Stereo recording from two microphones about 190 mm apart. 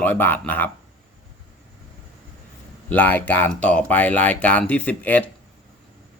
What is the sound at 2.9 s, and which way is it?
Speech, 10° left (ahead or behind).